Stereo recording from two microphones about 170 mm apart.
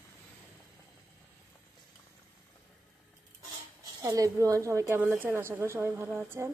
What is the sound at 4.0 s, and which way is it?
A woman's voice, 20° right (ahead or behind).